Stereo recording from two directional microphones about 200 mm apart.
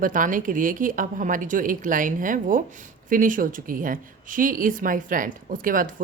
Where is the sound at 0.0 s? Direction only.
40° right (ahead or behind).